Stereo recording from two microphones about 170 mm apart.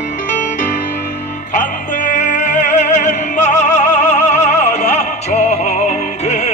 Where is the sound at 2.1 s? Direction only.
45° left (ahead or behind).